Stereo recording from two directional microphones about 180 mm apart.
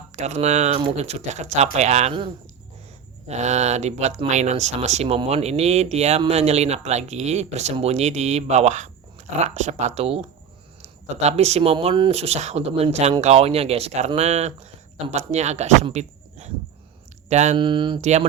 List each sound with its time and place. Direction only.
0.2 s speech: 40° right (ahead or behind)
17.6 s speech: 25° right (ahead or behind)
18.0 s speech: 40° right (ahead or behind)